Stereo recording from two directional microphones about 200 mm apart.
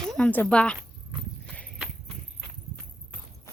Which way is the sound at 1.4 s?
5° left (ahead or behind).